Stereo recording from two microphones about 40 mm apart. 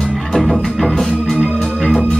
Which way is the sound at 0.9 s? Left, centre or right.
Centre.